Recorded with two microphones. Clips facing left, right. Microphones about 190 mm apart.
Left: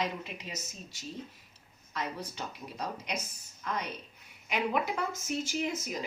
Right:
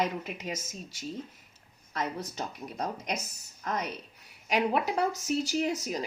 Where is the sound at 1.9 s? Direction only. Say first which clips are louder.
Right 3 dB; 45° right (ahead or behind).